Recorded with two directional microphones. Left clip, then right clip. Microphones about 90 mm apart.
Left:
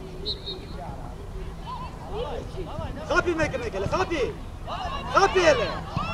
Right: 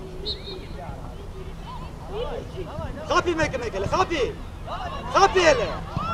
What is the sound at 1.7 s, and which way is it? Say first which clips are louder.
Speech: left 2 dB; 25° left (ahead or behind).